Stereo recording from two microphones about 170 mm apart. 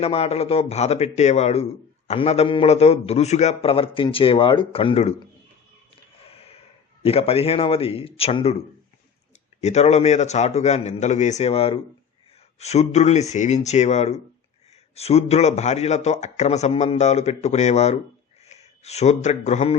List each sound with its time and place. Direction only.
0.0 s a man's voice: 35° left (ahead or behind)
6.1 s a sound: 35° left (ahead or behind)
7.0 s a man's voice: 35° left (ahead or behind)
9.6 s a man's voice: 40° left (ahead or behind)